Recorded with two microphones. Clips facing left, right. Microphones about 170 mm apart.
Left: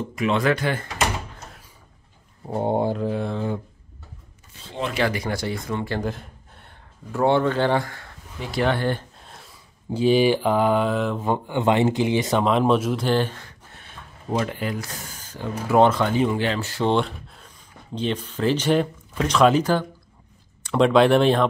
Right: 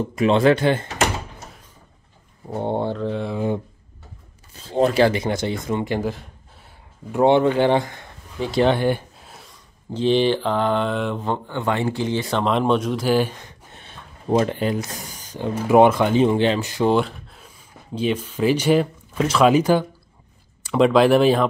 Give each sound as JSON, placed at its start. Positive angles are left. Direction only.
{"t": 0.1, "sound": "speech", "side_deg": -30}
{"t": 2.4, "sound": "speech", "side_deg": 10}
{"t": 3.3, "sound": "speech", "side_deg": -20}
{"t": 4.7, "sound": "speech", "side_deg": -35}
{"t": 5.9, "sound": "speech", "side_deg": 0}
{"t": 7.1, "sound": "speech", "side_deg": -20}
{"t": 9.8, "sound": "speech", "side_deg": 10}
{"t": 11.3, "sound": "speech", "side_deg": 15}
{"t": 12.3, "sound": "speech", "side_deg": 5}
{"t": 16.9, "sound": "a sound", "side_deg": 0}
{"t": 17.9, "sound": "speech", "side_deg": -10}
{"t": 20.6, "sound": "speech", "side_deg": 0}